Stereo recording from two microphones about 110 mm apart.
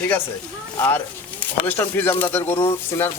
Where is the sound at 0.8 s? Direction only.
20° left (ahead or behind).